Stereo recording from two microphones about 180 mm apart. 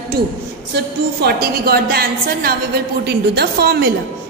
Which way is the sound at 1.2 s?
60° right (ahead or behind).